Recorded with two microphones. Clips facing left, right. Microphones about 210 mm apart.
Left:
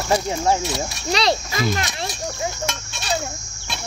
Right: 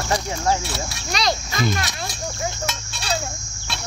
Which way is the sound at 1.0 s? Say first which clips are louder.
Left 3 dB; 30° left (ahead or behind).